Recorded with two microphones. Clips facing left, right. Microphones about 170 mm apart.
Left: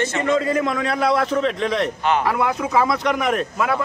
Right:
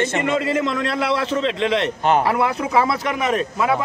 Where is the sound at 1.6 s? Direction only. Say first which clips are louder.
Right 1 dB; 90° right.